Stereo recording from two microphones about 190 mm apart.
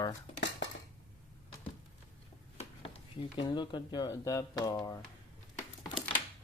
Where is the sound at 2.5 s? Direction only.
30° left (ahead or behind).